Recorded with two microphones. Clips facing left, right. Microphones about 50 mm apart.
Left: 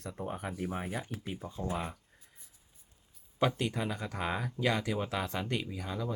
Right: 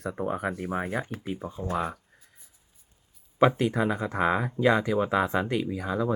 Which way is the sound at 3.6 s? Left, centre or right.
Centre.